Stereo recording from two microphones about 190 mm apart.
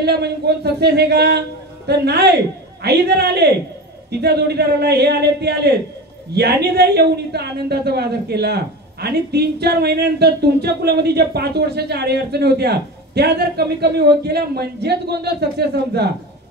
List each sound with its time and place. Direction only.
0.0 s a man's voice: 60° right (ahead or behind)